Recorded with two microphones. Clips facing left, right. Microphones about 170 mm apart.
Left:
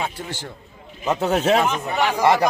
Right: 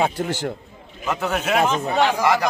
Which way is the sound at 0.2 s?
45° right (ahead or behind).